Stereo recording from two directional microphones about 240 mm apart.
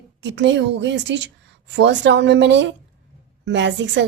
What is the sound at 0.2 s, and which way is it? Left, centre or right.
A woman's voice, right.